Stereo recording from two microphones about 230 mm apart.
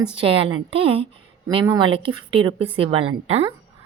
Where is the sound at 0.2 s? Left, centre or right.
Right.